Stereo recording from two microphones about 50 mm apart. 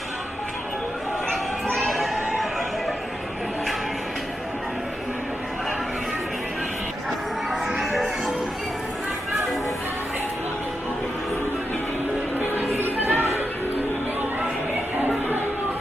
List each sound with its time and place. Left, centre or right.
1.9 s a sound: centre
7.7 s music: centre
12.8 s music: right